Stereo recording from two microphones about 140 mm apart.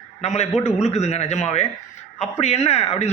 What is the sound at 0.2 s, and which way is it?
A man's voice, 50° left (ahead or behind).